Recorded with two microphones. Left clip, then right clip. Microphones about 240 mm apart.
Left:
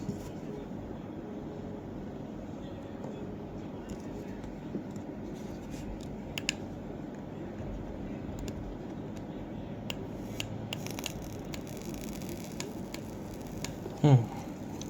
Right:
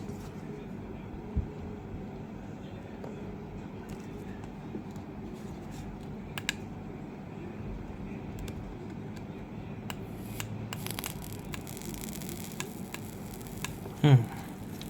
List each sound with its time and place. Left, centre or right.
14.0 s speech: right